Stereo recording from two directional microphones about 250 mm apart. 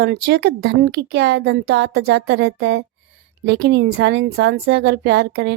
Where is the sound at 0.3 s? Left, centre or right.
Right.